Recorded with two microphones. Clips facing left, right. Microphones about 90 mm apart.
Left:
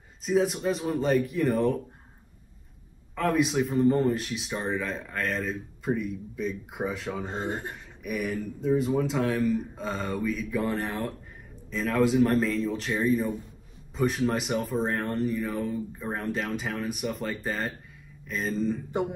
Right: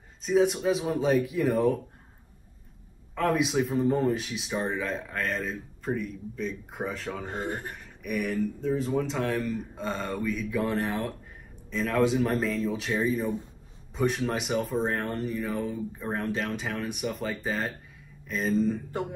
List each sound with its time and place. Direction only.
0.2 s speech: centre (ahead or behind)
3.2 s speech: centre (ahead or behind)
7.2 s speech: 20° left (ahead or behind)
8.0 s speech: centre (ahead or behind)
18.9 s speech: 20° left (ahead or behind)